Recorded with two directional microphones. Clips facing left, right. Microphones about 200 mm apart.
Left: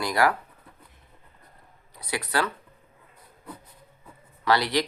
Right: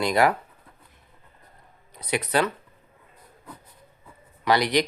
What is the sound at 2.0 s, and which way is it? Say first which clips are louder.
Speech: right 4 dB; 20° right (ahead or behind).